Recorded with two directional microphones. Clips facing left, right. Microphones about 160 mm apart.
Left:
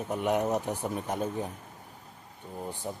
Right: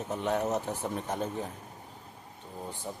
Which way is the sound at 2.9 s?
15° left (ahead or behind).